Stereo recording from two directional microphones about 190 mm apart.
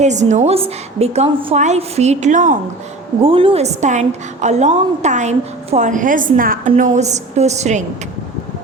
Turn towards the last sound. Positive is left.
turn(degrees=-35)  # may be behind; listen again after turning